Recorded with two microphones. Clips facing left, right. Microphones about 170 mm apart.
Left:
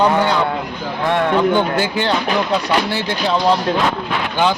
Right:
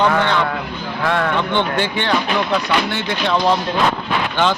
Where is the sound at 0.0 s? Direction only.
10° left (ahead or behind).